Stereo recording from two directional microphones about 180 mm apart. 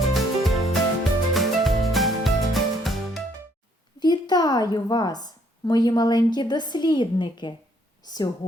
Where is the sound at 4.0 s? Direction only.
25° left (ahead or behind).